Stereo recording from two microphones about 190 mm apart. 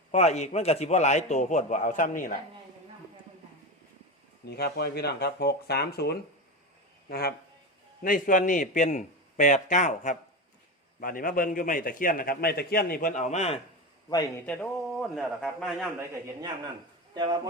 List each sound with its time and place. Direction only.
0.1 s a man's voice: 35° left (ahead or behind)
4.4 s a man's voice: 55° left (ahead or behind); by 13.6 s 35° left (ahead or behind)
14.4 s a man's voice: 5° left (ahead or behind)